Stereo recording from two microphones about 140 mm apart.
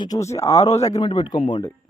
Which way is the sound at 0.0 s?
25° left (ahead or behind).